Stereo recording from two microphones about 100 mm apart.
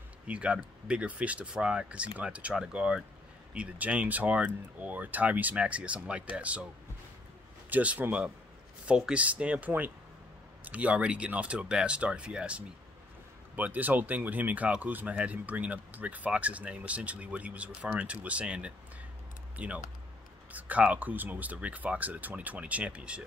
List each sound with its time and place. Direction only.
0.3 s speech: 10° right (ahead or behind)
7.7 s speech: 15° right (ahead or behind)